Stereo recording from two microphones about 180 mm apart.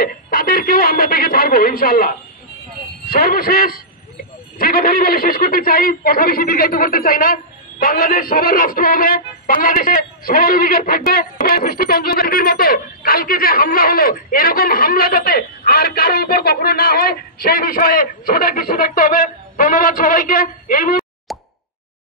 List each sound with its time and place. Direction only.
0.0 s a sound: 55° left (ahead or behind)
3.1 s a man's voice: 55° left (ahead or behind)
21.3 s plop: centre (ahead or behind)